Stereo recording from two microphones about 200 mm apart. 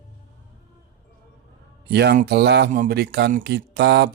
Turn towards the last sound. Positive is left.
turn(degrees=-55)  # may be behind; listen again after turning